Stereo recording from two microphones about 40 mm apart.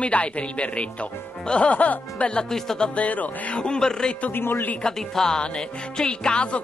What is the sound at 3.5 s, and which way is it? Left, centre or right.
Speech, left.